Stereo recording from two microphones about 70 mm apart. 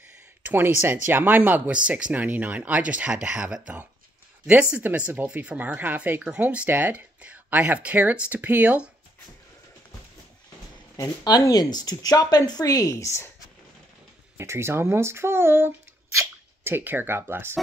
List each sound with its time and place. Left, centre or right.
0.4 s speech: right
11.0 s speech: left
14.3 s speech: right